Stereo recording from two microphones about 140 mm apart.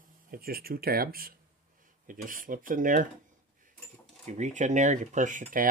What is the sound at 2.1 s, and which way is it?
Speech, 75° right (ahead or behind).